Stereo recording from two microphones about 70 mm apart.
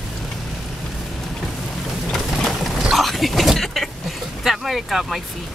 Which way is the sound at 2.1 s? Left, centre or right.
Centre.